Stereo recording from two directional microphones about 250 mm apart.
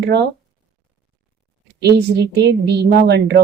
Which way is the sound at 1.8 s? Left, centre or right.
Right.